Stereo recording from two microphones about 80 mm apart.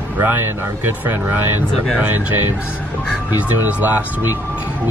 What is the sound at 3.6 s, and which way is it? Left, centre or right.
Speech, right.